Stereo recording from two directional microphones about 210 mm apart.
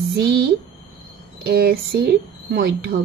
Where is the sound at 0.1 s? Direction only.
50° right (ahead or behind).